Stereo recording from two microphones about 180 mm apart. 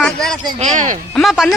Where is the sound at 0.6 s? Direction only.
45° right (ahead or behind).